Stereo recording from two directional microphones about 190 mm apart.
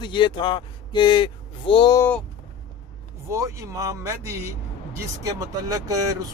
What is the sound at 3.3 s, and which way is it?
Speech, 15° right (ahead or behind).